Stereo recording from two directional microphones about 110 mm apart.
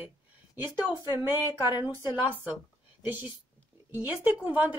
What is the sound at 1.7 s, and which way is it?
Speech, 20° right (ahead or behind).